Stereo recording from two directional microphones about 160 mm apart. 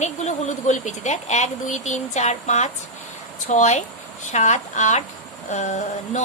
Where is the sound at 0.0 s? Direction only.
45° left (ahead or behind).